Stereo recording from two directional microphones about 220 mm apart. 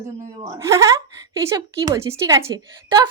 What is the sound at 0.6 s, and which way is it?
A woman's voice, 15° right (ahead or behind).